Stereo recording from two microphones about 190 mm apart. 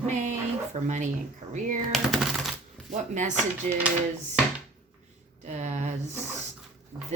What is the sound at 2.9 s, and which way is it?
Speech, 40° right (ahead or behind).